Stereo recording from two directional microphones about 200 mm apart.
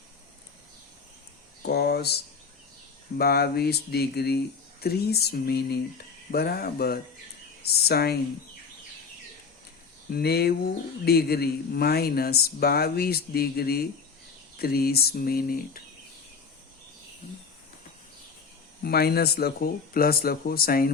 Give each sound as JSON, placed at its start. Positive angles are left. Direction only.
{"t": 1.6, "sound": "speech", "side_deg": 55}
{"t": 10.1, "sound": "speech", "side_deg": 50}
{"t": 18.8, "sound": "speech", "side_deg": 50}